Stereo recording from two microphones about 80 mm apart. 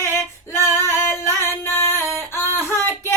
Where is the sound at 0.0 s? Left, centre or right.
Left.